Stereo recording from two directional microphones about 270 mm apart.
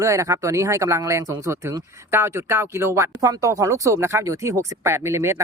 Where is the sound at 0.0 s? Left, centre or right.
Centre.